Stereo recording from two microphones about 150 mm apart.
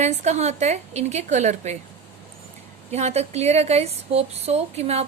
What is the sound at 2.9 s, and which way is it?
Speech, 45° right (ahead or behind).